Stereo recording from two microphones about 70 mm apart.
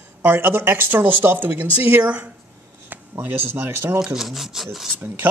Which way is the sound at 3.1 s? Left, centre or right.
Right.